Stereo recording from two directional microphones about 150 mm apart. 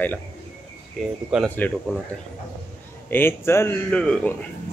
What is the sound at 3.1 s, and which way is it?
Speech, 15° left (ahead or behind).